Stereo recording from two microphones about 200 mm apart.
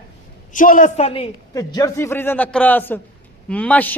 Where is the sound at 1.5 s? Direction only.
15° left (ahead or behind).